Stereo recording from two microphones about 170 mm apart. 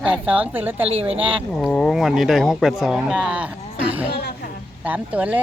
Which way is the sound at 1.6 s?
5° left (ahead or behind).